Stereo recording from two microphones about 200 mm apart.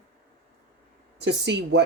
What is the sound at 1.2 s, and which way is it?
Speech, 60° right (ahead or behind).